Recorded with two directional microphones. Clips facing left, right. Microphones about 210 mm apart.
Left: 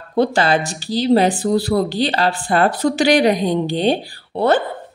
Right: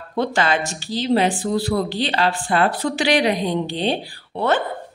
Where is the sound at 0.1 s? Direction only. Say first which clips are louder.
Left 4 dB; 35° left (ahead or behind).